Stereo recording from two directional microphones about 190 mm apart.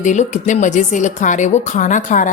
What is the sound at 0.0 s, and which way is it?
A woman's voice, 40° left (ahead or behind).